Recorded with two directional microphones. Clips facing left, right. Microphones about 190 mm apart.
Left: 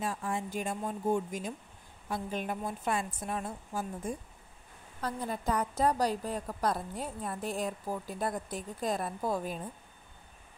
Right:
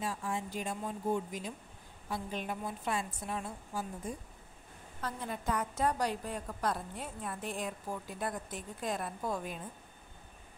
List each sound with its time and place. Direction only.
0.0 s a woman's voice: 50° left (ahead or behind)
5.0 s a woman's voice: 35° left (ahead or behind)